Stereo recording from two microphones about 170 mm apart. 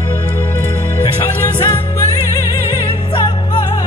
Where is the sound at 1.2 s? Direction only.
15° left (ahead or behind).